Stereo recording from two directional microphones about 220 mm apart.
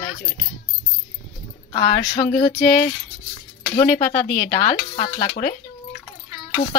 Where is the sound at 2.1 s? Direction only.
35° left (ahead or behind).